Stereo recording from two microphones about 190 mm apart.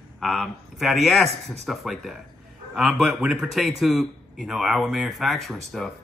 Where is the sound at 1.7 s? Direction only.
Centre (ahead or behind).